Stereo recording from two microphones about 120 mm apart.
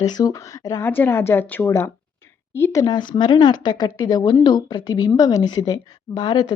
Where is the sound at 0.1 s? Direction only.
30° left (ahead or behind).